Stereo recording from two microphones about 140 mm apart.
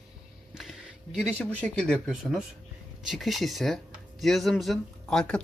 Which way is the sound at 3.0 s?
Centre (ahead or behind).